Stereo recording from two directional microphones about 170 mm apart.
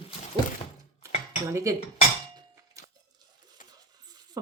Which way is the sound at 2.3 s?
20° right (ahead or behind).